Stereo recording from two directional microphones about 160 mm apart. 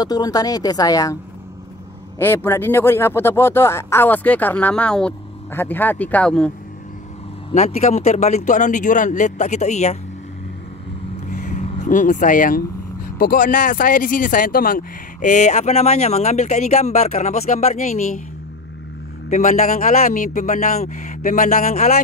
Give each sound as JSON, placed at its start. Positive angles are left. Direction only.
{"t": 0.0, "sound": "a woman's voice", "side_deg": 25}
{"t": 2.1, "sound": "speech", "side_deg": 15}
{"t": 7.5, "sound": "speech", "side_deg": 45}
{"t": 11.2, "sound": "speech", "side_deg": 50}
{"t": 19.2, "sound": "speech", "side_deg": 50}